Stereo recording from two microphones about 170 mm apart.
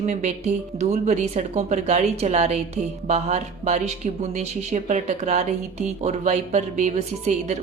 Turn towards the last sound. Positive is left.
turn(degrees=-40)  # may be behind; listen again after turning